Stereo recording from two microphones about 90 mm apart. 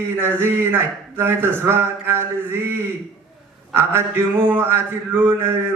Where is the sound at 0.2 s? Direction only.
25° right (ahead or behind).